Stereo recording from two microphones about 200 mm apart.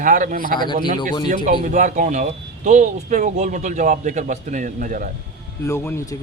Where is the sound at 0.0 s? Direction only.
40° right (ahead or behind).